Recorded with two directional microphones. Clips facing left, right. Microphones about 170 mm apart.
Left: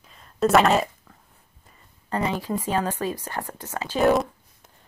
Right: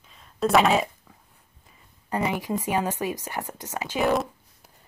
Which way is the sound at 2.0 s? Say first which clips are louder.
Left 1 dB; 15° right (ahead or behind).